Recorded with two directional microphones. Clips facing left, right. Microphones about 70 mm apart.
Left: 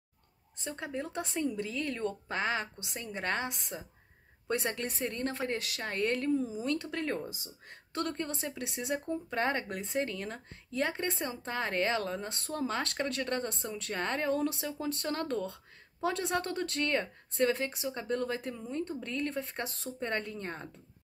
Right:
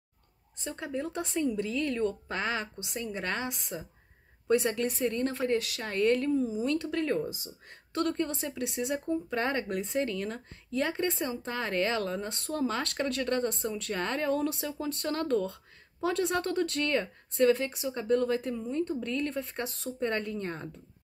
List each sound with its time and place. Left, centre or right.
0.7 s speech: left